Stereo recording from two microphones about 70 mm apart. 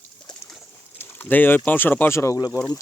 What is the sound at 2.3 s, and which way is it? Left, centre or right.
Speech, left.